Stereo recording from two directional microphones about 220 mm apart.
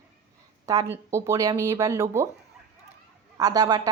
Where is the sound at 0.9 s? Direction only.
10° right (ahead or behind).